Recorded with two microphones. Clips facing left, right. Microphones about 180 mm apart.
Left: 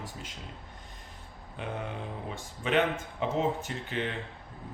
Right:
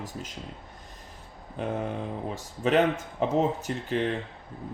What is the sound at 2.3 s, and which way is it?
Speech, 40° right (ahead or behind).